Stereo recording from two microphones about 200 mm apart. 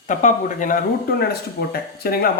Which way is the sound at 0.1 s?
40° left (ahead or behind).